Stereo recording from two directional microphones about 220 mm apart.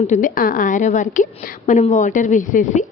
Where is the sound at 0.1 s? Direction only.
40° left (ahead or behind).